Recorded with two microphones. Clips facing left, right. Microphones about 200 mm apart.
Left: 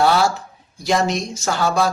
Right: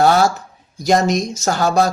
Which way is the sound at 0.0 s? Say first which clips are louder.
Right 3 dB; 45° right (ahead or behind).